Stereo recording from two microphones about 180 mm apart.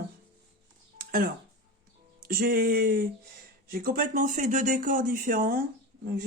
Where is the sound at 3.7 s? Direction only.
55° right (ahead or behind).